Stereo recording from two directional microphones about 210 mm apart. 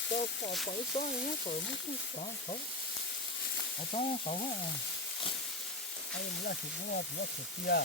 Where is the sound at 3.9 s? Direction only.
30° left (ahead or behind).